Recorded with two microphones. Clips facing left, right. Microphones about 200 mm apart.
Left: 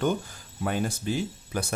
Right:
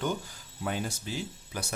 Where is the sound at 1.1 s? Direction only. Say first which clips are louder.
Left 7 dB; 55° left (ahead or behind).